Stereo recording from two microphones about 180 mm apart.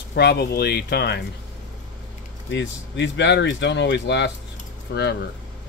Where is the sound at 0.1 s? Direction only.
65° left (ahead or behind).